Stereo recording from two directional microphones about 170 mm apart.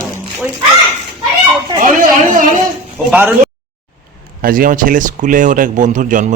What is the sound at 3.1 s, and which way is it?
Speech, 10° right (ahead or behind).